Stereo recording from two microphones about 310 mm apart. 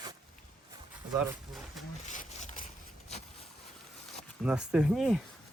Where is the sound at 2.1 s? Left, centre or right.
Left.